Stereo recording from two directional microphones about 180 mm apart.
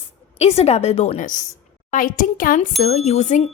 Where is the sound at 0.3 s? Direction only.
35° left (ahead or behind).